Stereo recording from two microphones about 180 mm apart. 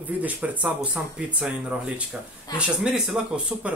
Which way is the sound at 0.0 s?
10° right (ahead or behind).